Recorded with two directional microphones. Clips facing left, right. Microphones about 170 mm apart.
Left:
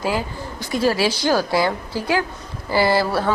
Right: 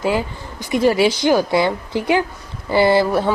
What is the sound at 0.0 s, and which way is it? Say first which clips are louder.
Speech: right 3 dB; 20° right (ahead or behind).